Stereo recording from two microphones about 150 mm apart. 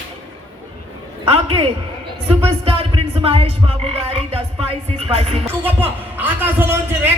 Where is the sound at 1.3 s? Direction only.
40° right (ahead or behind).